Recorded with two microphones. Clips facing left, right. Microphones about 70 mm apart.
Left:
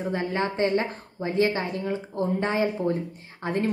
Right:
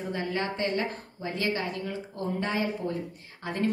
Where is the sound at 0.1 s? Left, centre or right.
Left.